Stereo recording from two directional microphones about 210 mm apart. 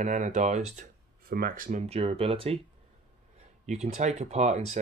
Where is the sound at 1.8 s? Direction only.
30° right (ahead or behind).